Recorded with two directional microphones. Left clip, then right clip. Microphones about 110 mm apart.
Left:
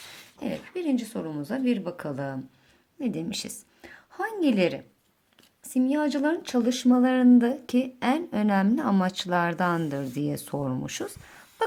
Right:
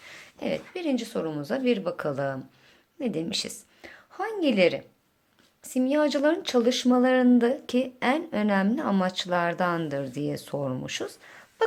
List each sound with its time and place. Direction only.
0.3 s a woman's voice: 25° left (ahead or behind)
3.8 s a woman's voice: 40° left (ahead or behind)
5.6 s speech: 20° left (ahead or behind); by 11.3 s 50° left (ahead or behind)